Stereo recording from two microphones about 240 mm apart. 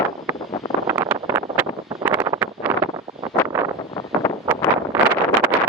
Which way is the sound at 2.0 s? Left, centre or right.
Centre.